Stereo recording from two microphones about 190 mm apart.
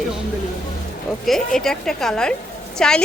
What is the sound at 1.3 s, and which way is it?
A woman's voice, centre (ahead or behind).